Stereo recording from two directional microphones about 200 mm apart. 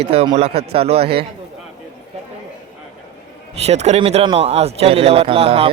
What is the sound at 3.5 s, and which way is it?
A man's voice, 30° right (ahead or behind).